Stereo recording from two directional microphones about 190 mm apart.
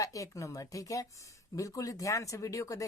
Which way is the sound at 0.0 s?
15° left (ahead or behind).